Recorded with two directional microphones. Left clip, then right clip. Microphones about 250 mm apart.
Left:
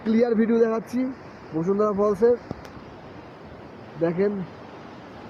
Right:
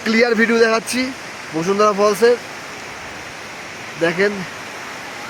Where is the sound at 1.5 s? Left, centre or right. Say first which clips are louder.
Right 7 dB; right.